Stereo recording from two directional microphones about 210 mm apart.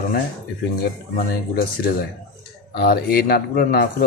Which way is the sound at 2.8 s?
50° left (ahead or behind).